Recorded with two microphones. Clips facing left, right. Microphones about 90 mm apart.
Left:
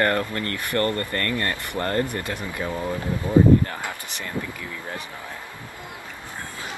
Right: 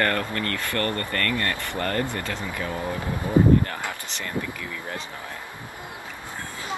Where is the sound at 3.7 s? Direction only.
15° left (ahead or behind).